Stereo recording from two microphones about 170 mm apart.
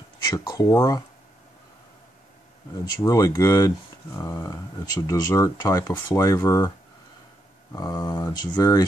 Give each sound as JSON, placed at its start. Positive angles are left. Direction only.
{"t": 0.4, "sound": "speech", "side_deg": 20}
{"t": 2.8, "sound": "speech", "side_deg": 20}
{"t": 7.7, "sound": "speech", "side_deg": 20}